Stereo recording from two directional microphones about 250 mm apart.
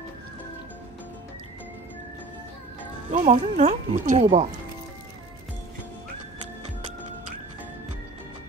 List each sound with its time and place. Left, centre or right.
3.1 s speech: right